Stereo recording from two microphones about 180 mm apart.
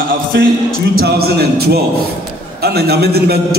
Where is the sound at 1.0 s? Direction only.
60° right (ahead or behind).